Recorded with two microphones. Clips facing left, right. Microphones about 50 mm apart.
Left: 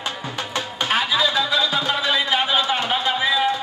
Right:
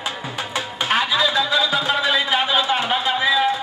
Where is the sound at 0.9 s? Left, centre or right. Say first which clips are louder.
Right 1 dB; centre.